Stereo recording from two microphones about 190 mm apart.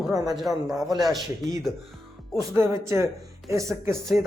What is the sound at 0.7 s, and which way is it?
Speech, 20° right (ahead or behind).